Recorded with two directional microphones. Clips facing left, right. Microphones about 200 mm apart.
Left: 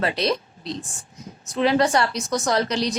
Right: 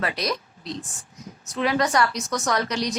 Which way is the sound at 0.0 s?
25° left (ahead or behind).